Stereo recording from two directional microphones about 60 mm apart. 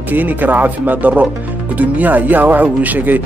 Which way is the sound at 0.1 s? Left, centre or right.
Right.